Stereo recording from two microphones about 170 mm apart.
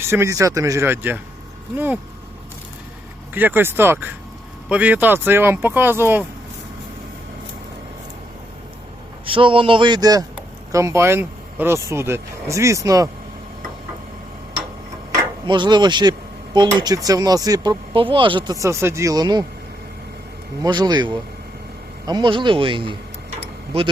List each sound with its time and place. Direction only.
0.0 s speech: 15° right (ahead or behind)
3.3 s speech: 10° right (ahead or behind)
9.2 s speech: 30° right (ahead or behind)
15.4 s speech: 25° right (ahead or behind)
20.6 s speech: 25° right (ahead or behind)